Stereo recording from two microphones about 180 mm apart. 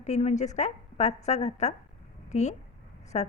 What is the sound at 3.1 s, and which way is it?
Speech, 35° left (ahead or behind).